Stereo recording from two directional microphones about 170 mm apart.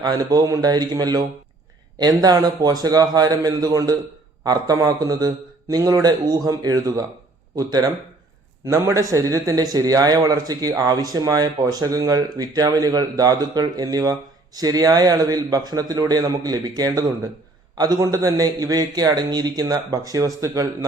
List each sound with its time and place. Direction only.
0.0 s a man's voice: 25° right (ahead or behind)